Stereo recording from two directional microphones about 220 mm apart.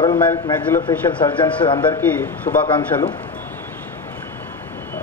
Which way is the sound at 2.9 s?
20° left (ahead or behind).